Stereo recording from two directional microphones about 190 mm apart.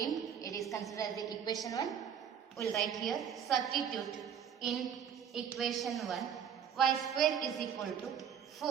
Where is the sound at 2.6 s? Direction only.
Centre (ahead or behind).